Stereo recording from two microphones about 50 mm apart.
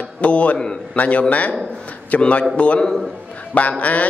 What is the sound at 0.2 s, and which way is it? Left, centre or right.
A man's voice, left.